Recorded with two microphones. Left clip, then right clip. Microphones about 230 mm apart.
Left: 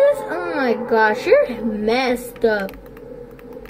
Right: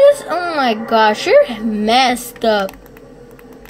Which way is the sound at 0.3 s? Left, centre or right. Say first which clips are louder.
Right 4 dB; right.